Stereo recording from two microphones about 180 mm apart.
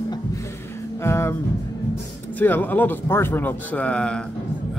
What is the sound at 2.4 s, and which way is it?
Speech, 10° left (ahead or behind).